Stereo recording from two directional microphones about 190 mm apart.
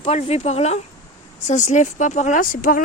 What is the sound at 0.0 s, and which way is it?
Speech, 30° left (ahead or behind).